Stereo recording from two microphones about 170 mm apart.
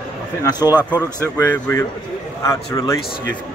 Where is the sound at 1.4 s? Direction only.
10° left (ahead or behind).